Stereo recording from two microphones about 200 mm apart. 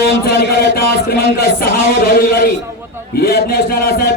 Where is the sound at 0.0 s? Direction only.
50° left (ahead or behind).